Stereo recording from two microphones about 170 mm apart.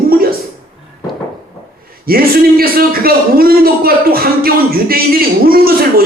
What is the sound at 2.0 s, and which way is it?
A man's voice, 60° right (ahead or behind).